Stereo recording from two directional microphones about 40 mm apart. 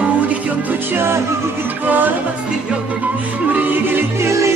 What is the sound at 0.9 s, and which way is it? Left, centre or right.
Music, right.